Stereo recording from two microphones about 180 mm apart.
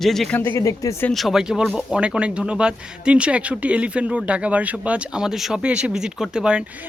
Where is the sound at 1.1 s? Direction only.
Centre (ahead or behind).